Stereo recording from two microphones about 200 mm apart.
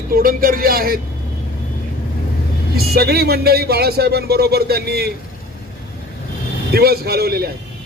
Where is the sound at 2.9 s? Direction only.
55° right (ahead or behind).